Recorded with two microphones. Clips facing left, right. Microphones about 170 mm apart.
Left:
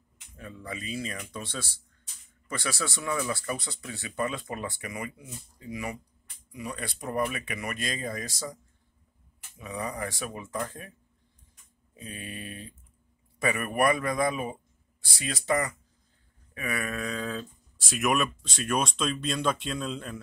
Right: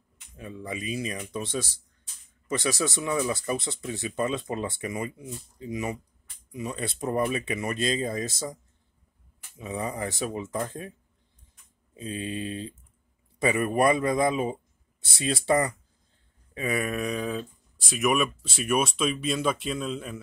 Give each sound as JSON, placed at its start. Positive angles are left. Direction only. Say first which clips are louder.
{"t": 0.4, "sound": "speech", "louder": "right 4 dB", "side_deg": -20}
{"t": 9.6, "sound": "speech", "louder": "right 3 dB", "side_deg": -25}
{"t": 11.9, "sound": "a man's voice", "louder": "right 8 dB", "side_deg": -25}
{"t": 17.7, "sound": "speech", "louder": "right 2 dB", "side_deg": 0}